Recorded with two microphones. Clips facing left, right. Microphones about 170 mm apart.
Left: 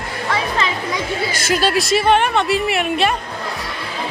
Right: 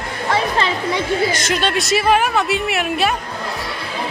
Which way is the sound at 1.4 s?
5° left (ahead or behind).